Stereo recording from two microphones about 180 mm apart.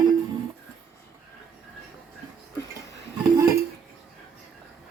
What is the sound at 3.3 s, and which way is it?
Dishes, 20° right (ahead or behind).